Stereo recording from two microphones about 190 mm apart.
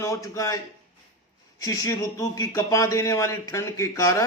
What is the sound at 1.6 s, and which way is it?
Speech, 20° left (ahead or behind).